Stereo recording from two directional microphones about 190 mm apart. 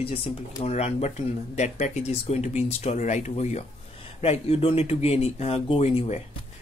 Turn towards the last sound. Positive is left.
turn(degrees=35)  # may be behind; listen again after turning